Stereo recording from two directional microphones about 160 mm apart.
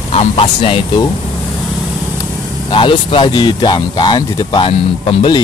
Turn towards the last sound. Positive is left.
turn(degrees=35)  # may be behind; listen again after turning